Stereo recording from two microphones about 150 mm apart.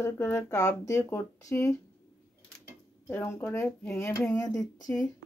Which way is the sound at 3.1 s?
15° left (ahead or behind).